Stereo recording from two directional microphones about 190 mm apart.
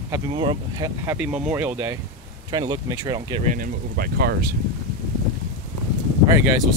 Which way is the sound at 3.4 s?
45° right (ahead or behind).